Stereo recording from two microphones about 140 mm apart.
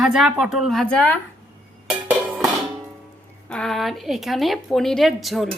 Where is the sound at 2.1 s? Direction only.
Centre (ahead or behind).